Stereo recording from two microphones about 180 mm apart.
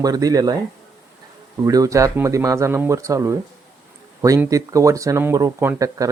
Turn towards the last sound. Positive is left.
turn(degrees=-20)  # may be behind; listen again after turning